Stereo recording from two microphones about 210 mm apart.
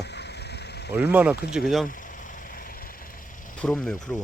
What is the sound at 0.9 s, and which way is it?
Speech, 5° right (ahead or behind).